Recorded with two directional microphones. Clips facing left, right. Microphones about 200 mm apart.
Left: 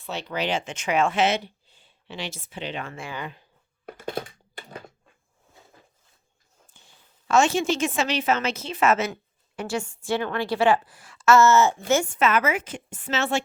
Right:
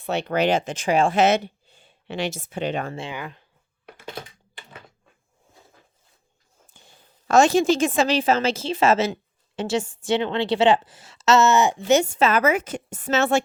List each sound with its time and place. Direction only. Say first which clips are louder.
0.0 s speech: right 7 dB; 60° right (ahead or behind); by 2.9 s 45° right (ahead or behind)
2.9 s a woman's voice: right 4 dB; 25° right (ahead or behind)
3.8 s computer keyboard: left 6 dB; 45° left (ahead or behind)
7.3 s a woman's voice: right 4 dB; 35° right (ahead or behind); by 11.8 s 15° right (ahead or behind)
12.2 s a woman's voice: right 3 dB; 35° right (ahead or behind)